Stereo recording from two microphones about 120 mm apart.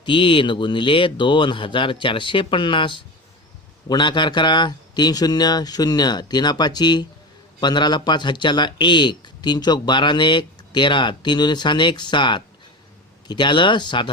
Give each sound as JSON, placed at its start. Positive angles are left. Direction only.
{"t": 0.0, "sound": "speech", "side_deg": 45}